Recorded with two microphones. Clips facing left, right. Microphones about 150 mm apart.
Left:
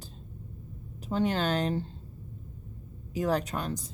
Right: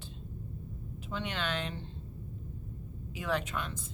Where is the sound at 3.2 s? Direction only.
40° left (ahead or behind).